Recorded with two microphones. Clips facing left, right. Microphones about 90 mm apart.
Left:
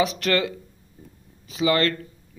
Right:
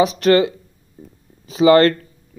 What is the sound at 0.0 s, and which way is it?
Speech, 25° right (ahead or behind).